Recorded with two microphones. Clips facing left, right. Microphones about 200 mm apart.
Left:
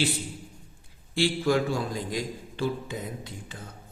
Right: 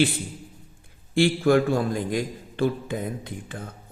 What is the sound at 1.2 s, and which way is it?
Speech, 55° right (ahead or behind).